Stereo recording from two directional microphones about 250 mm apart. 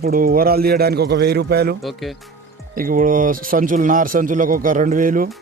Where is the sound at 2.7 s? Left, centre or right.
Right.